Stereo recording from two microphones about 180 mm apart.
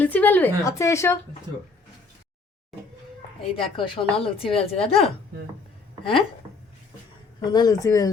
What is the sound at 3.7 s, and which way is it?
Speech, 30° left (ahead or behind).